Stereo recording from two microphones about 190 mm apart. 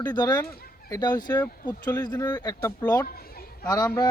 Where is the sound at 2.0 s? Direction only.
20° left (ahead or behind).